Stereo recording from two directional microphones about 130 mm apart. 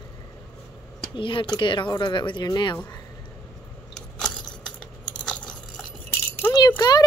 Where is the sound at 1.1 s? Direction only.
40° left (ahead or behind).